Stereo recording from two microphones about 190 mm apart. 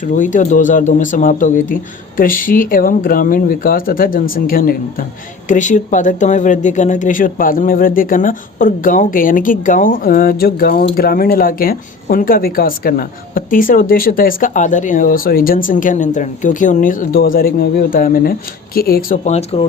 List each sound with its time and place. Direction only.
0.0 s speech: 45° left (ahead or behind)